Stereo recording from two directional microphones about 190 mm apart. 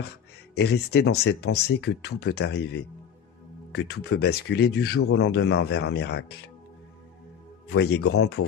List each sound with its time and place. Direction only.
0.6 s speech: 60° left (ahead or behind)
7.6 s speech: 60° left (ahead or behind)